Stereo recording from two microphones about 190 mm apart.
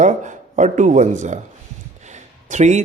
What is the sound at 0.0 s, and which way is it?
Speech, 40° right (ahead or behind).